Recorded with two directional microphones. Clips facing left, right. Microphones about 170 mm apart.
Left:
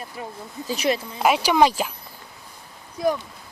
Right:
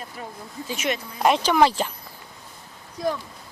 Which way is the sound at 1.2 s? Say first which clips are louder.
Even; 5° left (ahead or behind).